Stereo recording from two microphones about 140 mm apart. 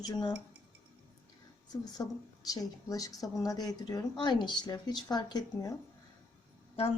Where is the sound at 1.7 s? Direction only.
25° left (ahead or behind).